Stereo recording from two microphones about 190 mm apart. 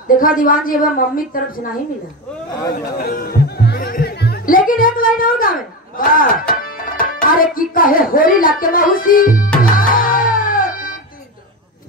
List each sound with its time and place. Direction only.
0.2 s a woman's voice: 45° left (ahead or behind)
2.7 s music: 50° left (ahead or behind)